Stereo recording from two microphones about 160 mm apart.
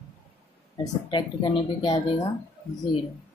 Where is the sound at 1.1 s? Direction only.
30° left (ahead or behind).